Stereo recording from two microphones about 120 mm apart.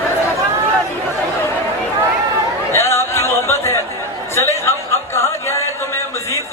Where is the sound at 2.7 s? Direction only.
20° left (ahead or behind).